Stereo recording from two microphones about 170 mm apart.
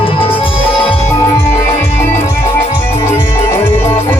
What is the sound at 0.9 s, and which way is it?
Music, 15° left (ahead or behind).